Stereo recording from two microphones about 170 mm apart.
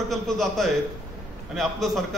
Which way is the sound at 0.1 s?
Centre (ahead or behind).